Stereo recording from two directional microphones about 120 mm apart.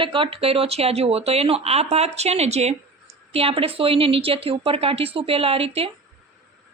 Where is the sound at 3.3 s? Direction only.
50° right (ahead or behind).